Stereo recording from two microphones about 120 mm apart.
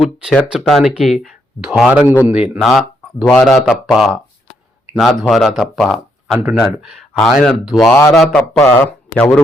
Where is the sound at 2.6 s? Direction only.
Centre (ahead or behind).